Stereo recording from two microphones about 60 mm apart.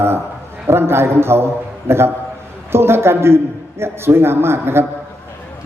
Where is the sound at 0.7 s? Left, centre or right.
Right.